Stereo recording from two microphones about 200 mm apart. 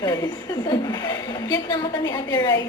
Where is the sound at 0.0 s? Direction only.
20° left (ahead or behind).